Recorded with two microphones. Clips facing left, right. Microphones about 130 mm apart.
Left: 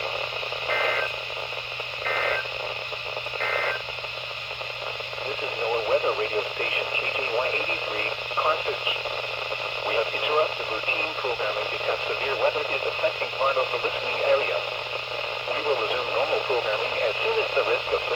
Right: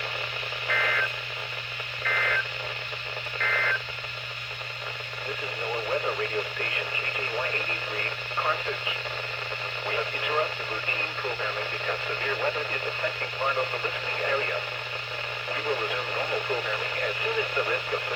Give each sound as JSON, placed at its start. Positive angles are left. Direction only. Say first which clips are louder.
{"t": 0.7, "sound": "reversing beeps", "louder": "left 4 dB", "side_deg": 20}
{"t": 2.0, "sound": "sidetone", "louder": "left 3 dB", "side_deg": 30}
{"t": 3.4, "sound": "beep", "louder": "left 2 dB", "side_deg": 35}
{"t": 5.7, "sound": "radio", "louder": "left 5 dB", "side_deg": 25}
{"t": 7.9, "sound": "radio", "louder": "left 4 dB", "side_deg": 15}